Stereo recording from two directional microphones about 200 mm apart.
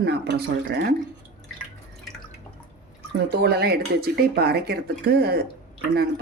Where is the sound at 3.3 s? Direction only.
50° right (ahead or behind).